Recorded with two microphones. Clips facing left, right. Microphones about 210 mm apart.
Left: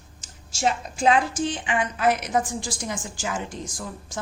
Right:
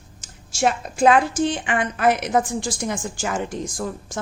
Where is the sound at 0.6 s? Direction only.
55° right (ahead or behind).